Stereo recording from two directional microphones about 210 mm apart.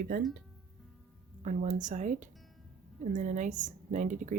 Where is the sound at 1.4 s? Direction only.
35° right (ahead or behind).